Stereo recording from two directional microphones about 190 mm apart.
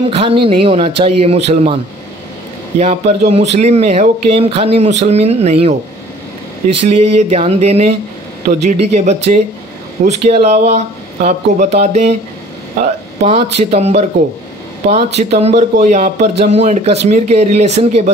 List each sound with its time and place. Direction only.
0.1 s speech: 30° right (ahead or behind)
2.8 s speech: 35° right (ahead or behind)
6.8 s speech: 30° right (ahead or behind)